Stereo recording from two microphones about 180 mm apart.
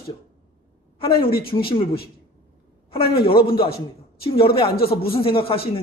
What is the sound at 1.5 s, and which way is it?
Speech, 30° left (ahead or behind).